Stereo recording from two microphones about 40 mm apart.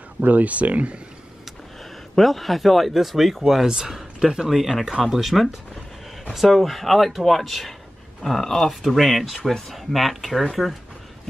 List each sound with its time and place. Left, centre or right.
0.2 s speech: right
2.1 s speech: centre
6.5 s speech: centre
8.8 s speech: centre